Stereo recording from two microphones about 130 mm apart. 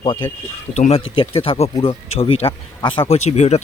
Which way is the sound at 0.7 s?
60° left (ahead or behind).